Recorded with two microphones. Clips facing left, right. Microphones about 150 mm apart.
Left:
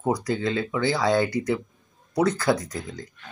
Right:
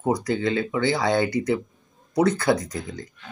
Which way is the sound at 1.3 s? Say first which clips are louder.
Right 2 dB; 20° right (ahead or behind).